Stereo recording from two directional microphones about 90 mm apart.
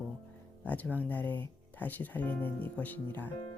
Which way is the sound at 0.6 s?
15° left (ahead or behind).